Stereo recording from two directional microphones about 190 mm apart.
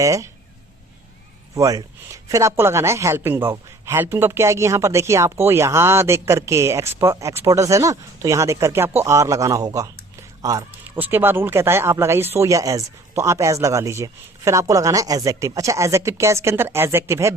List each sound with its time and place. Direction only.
0.0 s a man's voice: 15° right (ahead or behind)
1.5 s a man's voice: 15° right (ahead or behind)